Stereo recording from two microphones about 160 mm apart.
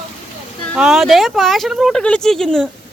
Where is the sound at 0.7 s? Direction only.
5° right (ahead or behind).